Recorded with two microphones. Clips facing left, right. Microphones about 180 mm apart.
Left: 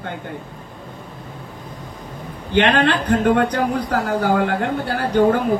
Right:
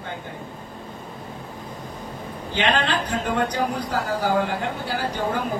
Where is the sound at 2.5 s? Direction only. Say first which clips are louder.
Left 6 dB; 60° left (ahead or behind).